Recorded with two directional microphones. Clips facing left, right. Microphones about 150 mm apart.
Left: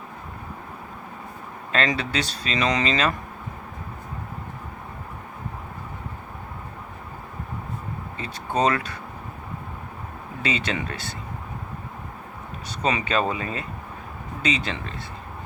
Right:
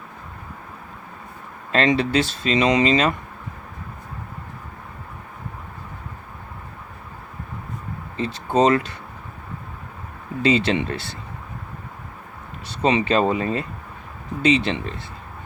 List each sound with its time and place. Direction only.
1.7 s speech: 25° right (ahead or behind)
8.2 s speech: 25° right (ahead or behind)
10.4 s speech: 30° right (ahead or behind)
12.6 s speech: 25° right (ahead or behind)